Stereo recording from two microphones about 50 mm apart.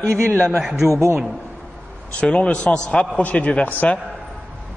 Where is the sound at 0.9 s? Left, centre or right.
Right.